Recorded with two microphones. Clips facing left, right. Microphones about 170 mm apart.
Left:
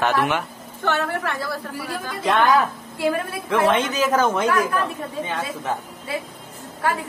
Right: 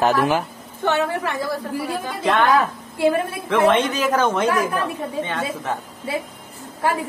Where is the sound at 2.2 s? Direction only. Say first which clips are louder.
Even; centre (ahead or behind).